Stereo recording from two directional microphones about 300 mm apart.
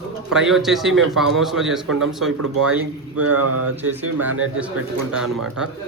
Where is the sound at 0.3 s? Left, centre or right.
Centre.